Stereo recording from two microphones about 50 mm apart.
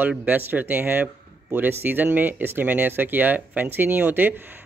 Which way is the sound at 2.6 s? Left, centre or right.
Right.